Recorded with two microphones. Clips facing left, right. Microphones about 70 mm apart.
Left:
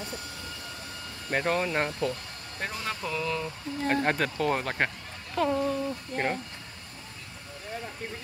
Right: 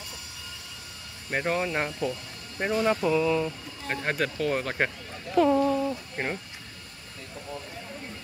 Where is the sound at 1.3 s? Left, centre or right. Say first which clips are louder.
Even; centre.